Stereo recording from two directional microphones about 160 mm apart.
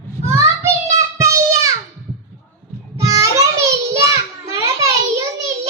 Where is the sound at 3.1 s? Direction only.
20° right (ahead or behind).